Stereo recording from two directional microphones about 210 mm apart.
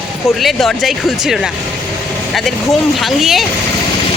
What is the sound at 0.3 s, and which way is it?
Speech, centre (ahead or behind).